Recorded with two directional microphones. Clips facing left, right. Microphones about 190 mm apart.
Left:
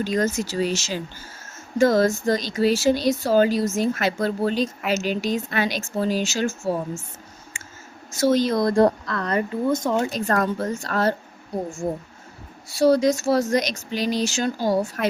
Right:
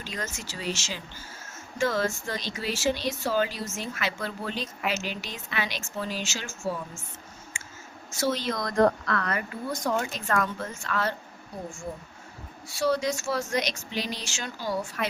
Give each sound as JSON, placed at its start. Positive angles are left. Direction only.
{"t": 0.0, "sound": "speech", "side_deg": 40}
{"t": 8.2, "sound": "speech", "side_deg": 40}
{"t": 10.0, "sound": "speech", "side_deg": 35}
{"t": 12.8, "sound": "speech", "side_deg": 40}